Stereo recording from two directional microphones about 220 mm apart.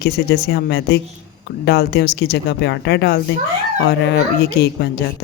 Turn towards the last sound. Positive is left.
turn(degrees=45)  # may be behind; listen again after turning